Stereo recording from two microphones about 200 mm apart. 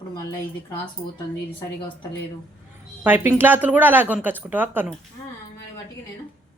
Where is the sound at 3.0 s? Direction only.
10° right (ahead or behind).